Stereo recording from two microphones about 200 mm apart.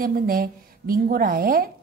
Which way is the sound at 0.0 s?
45° right (ahead or behind).